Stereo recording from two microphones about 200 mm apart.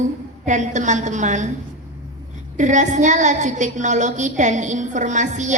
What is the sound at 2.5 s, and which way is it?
A woman's voice, 40° right (ahead or behind).